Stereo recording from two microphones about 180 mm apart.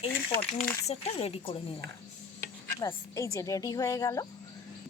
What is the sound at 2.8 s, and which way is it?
Speech, 15° left (ahead or behind).